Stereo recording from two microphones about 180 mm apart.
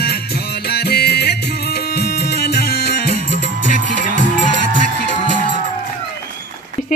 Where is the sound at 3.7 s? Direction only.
45° left (ahead or behind).